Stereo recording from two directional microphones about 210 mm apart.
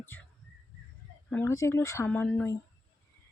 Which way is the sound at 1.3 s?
10° left (ahead or behind).